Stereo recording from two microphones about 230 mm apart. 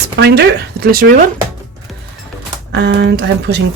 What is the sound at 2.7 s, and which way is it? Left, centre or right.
Speech, right.